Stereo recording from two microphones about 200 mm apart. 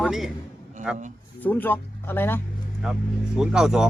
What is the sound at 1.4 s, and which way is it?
Speech, 10° left (ahead or behind).